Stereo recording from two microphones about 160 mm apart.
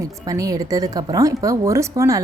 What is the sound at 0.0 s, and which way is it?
A woman's voice, 20° right (ahead or behind).